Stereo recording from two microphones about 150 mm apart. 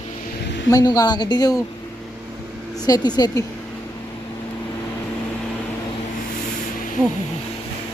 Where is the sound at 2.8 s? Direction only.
25° left (ahead or behind).